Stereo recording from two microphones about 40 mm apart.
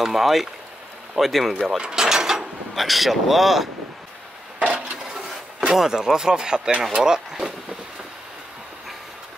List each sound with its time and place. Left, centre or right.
0.0 s speech: centre
1.8 s mechanisms: centre
2.7 s speech: centre
4.6 s a sound: right
4.9 s a sound: centre
5.7 s speech: centre